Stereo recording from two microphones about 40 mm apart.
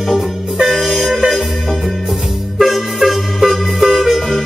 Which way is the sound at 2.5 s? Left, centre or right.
Centre.